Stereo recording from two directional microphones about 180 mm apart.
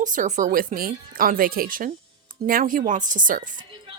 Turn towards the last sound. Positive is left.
turn(degrees=-45)  # may be behind; listen again after turning